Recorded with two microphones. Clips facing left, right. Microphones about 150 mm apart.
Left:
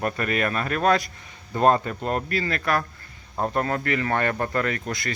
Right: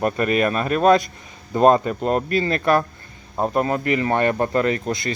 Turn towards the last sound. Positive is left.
turn(degrees=-25)  # may be behind; listen again after turning